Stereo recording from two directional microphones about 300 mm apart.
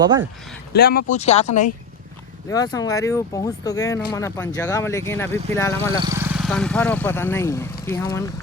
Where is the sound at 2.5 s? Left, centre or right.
Centre.